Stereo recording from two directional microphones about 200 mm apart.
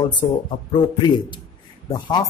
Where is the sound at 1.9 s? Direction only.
20° left (ahead or behind).